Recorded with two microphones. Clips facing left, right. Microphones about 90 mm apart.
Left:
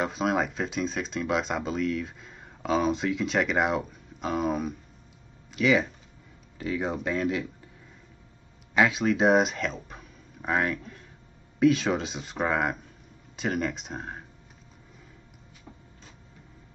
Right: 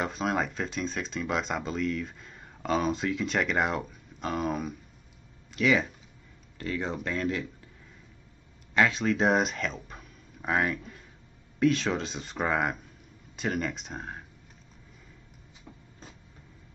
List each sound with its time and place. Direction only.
0.0 s speech: centre (ahead or behind)
8.7 s speech: 5° left (ahead or behind)